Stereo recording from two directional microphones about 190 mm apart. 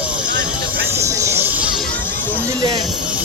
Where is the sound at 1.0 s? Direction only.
15° right (ahead or behind).